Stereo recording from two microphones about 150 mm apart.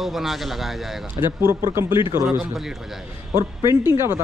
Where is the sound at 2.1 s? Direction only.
60° right (ahead or behind).